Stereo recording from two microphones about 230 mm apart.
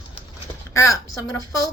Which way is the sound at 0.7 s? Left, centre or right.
Centre.